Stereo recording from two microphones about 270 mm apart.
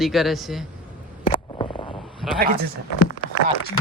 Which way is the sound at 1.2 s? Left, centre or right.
Centre.